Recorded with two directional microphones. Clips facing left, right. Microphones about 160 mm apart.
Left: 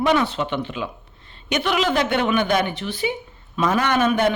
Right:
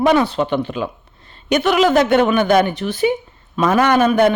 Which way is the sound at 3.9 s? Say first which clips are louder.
Right 5 dB; 40° right (ahead or behind).